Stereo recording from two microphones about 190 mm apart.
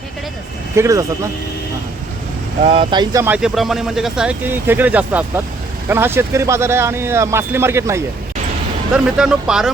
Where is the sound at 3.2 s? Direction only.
5° right (ahead or behind).